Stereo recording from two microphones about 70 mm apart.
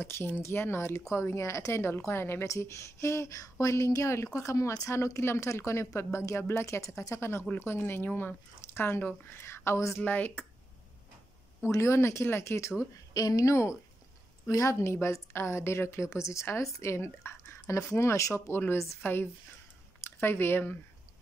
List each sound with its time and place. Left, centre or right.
0.0 s speech: left
2.4 s a woman's voice: left
10.0 s speech: left
11.6 s speech: left
13.1 s a woman's voice: left
14.5 s a woman's voice: left